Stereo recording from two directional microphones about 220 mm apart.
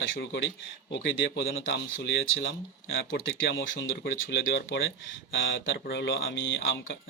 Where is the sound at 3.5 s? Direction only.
55° left (ahead or behind).